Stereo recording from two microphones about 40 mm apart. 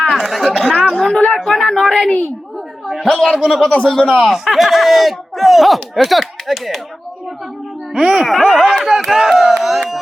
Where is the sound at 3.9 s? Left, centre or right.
Centre.